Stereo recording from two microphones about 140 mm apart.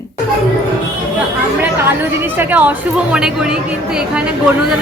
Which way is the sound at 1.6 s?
15° right (ahead or behind).